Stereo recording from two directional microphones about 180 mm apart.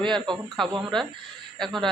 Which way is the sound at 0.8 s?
Centre (ahead or behind).